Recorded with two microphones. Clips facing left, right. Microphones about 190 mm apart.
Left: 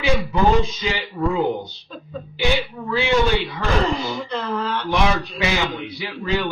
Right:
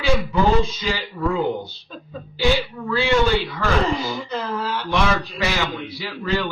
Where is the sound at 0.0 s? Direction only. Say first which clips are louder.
Even; 20° left (ahead or behind).